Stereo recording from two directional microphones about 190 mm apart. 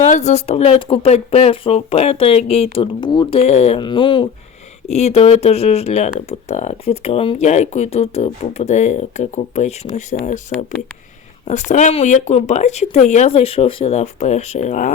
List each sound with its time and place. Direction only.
0.0 s speech: 35° left (ahead or behind)
4.9 s speech: 35° left (ahead or behind)
11.4 s speech: 40° left (ahead or behind)